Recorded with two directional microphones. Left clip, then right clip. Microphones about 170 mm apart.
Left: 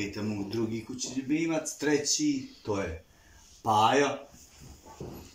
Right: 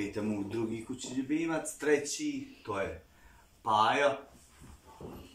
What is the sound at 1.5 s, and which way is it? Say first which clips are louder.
Speech: left 1 dB; 20° left (ahead or behind).